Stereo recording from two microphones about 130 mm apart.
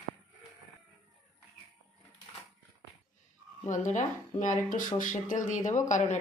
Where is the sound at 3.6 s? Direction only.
70° left (ahead or behind).